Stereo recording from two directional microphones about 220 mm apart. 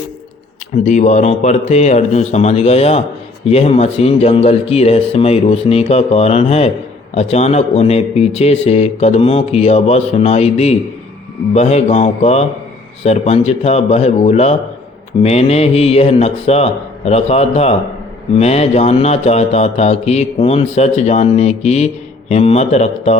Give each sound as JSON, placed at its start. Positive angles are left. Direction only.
{"t": 0.9, "sound": "a man's voice", "side_deg": 30}